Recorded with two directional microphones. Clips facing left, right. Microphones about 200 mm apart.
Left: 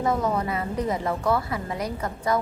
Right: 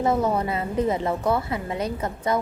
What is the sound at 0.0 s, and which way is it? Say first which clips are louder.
A woman's voice: right 2 dB; 25° right (ahead or behind).